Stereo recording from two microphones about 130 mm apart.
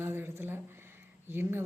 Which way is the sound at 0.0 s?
20° right (ahead or behind).